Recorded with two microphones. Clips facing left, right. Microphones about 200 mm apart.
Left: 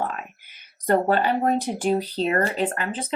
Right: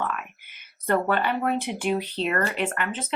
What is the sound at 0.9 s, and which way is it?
Speech, 35° left (ahead or behind).